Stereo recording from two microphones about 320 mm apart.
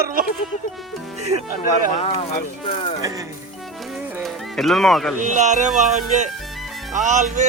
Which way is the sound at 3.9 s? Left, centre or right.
Centre.